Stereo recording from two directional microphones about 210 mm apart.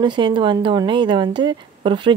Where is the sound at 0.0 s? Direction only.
20° right (ahead or behind).